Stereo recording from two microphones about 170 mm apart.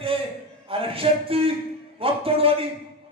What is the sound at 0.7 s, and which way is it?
A man's voice, 35° right (ahead or behind).